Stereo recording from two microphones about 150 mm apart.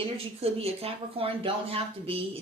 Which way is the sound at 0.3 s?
40° right (ahead or behind).